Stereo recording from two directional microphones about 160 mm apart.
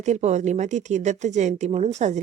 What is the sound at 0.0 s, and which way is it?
Speech, 45° right (ahead or behind).